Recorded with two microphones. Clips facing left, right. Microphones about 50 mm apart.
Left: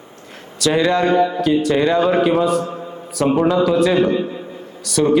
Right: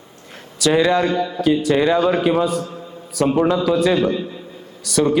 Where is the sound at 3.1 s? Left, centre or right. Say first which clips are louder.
Left 1 dB; centre.